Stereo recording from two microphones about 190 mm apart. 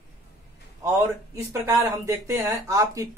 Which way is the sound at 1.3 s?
15° right (ahead or behind).